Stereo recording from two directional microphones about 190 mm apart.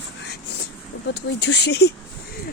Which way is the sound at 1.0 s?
65° left (ahead or behind).